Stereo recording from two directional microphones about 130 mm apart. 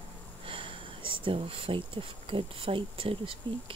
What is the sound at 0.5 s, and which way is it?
Speech, 40° right (ahead or behind).